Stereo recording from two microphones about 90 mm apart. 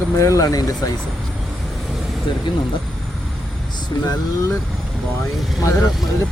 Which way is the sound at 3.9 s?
45° left (ahead or behind).